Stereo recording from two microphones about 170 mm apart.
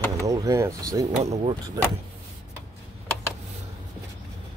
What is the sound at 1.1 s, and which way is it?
Speech, 40° right (ahead or behind).